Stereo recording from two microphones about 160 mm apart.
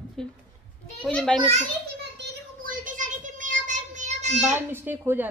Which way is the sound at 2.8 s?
55° right (ahead or behind).